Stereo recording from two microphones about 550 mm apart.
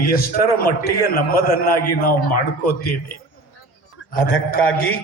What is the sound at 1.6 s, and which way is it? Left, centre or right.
Speech, centre.